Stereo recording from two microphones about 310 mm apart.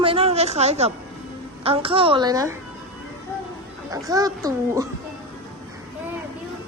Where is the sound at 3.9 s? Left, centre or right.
Centre.